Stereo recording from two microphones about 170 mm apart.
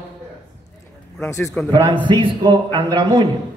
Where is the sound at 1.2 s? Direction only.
15° left (ahead or behind).